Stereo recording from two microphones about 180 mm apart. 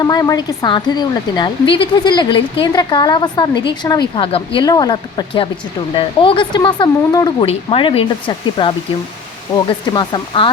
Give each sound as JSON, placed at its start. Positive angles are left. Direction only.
{"t": 0.0, "sound": "speech", "side_deg": 20}
{"t": 9.9, "sound": "speech", "side_deg": 25}